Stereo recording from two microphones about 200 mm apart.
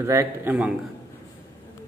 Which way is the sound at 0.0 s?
15° right (ahead or behind).